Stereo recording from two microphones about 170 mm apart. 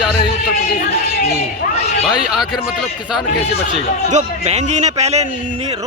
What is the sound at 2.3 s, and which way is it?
Speech, centre (ahead or behind).